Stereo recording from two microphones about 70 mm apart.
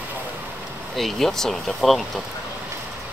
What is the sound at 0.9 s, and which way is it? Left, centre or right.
Speech, centre.